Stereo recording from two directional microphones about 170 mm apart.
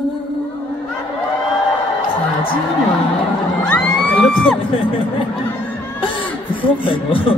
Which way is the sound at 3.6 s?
5° left (ahead or behind).